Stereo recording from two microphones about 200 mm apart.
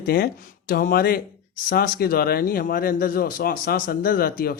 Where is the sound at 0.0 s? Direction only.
50° left (ahead or behind).